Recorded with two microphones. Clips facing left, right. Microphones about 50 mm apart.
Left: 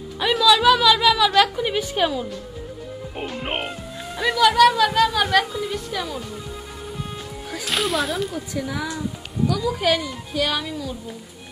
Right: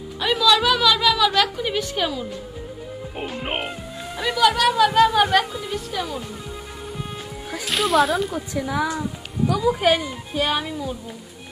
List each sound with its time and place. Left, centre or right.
0.2 s a woman's voice: centre
3.2 s a woman's voice: centre
7.6 s speech: centre
9.5 s speech: centre